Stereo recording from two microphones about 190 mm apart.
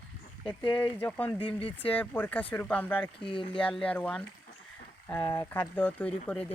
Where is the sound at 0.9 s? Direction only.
10° left (ahead or behind).